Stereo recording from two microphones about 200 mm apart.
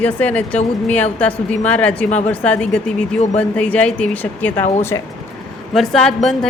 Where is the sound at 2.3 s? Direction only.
5° left (ahead or behind).